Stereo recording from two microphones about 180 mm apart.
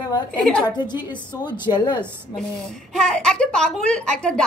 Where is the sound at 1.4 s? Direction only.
25° left (ahead or behind).